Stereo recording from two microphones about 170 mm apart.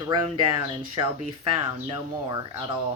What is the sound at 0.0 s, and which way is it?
Speech, 30° right (ahead or behind).